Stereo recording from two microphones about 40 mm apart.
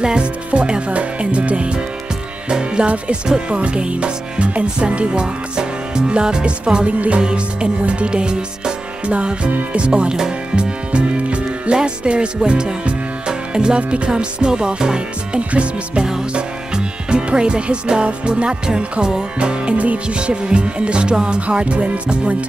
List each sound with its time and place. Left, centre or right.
0.0 s speech: right
2.5 s music: right
3.3 s speech: right
9.5 s speech: right
9.8 s speech: right
10.1 s music: centre
15.5 s speech: right
16.3 s music: right
20.2 s speech: right